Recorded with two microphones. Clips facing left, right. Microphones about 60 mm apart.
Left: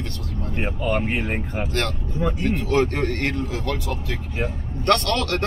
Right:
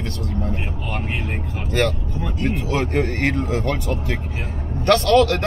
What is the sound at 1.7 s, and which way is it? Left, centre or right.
Speech, centre.